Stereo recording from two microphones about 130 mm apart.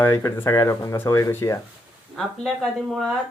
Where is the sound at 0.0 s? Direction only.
20° left (ahead or behind).